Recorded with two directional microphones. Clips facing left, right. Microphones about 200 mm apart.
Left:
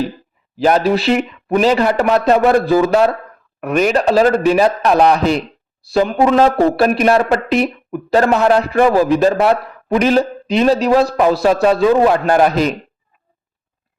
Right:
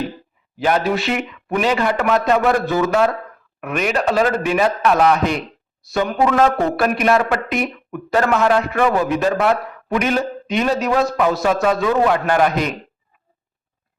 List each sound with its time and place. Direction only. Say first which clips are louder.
0.5 s speech: left 5 dB; 40° left (ahead or behind)